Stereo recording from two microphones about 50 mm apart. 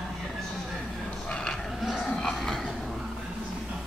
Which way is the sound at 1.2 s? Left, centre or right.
Centre.